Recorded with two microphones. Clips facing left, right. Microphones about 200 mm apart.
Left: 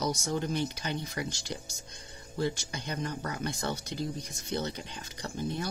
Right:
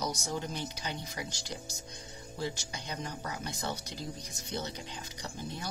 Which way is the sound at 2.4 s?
60° left (ahead or behind).